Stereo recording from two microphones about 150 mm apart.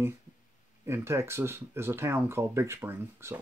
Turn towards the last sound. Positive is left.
turn(degrees=-15)  # may be behind; listen again after turning